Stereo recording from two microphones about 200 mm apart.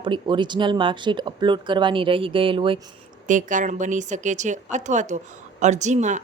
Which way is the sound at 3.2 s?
40° right (ahead or behind).